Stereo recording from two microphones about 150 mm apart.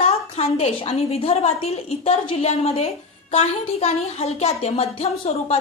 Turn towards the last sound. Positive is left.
turn(degrees=45)  # may be behind; listen again after turning